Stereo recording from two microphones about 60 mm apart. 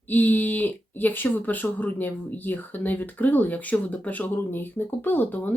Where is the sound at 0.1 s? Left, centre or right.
Left.